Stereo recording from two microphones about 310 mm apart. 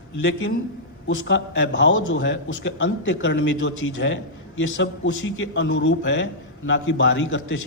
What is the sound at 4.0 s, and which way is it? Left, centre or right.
A man's voice, left.